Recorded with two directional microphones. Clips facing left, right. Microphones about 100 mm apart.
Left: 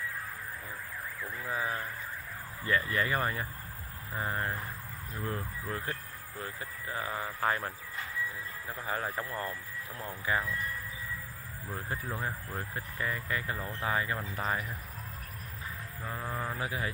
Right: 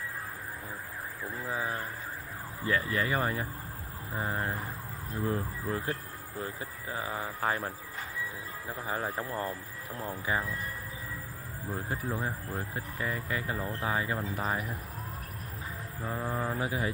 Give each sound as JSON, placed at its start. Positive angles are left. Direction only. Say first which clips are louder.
{"t": 1.2, "sound": "speech", "louder": "right 1 dB", "side_deg": -20}
{"t": 4.1, "sound": "speech", "louder": "right 1 dB", "side_deg": 0}
{"t": 9.2, "sound": "speech", "louder": "right 2 dB", "side_deg": -30}
{"t": 12.1, "sound": "speech", "louder": "right 2 dB", "side_deg": -5}
{"t": 12.7, "sound": "speech", "louder": "left 1 dB", "side_deg": -15}
{"t": 16.0, "sound": "speech", "louder": "right 4 dB", "side_deg": -15}